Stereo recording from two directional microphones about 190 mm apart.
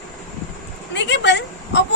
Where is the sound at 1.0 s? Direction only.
70° left (ahead or behind).